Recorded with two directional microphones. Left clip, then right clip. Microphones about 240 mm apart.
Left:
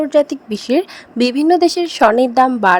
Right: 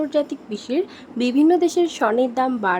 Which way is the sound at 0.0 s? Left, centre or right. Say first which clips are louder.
Left 8 dB; left.